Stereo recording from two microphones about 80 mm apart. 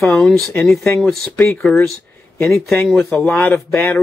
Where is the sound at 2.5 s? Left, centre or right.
Centre.